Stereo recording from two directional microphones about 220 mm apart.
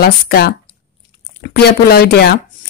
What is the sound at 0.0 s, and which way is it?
Speech, 45° left (ahead or behind).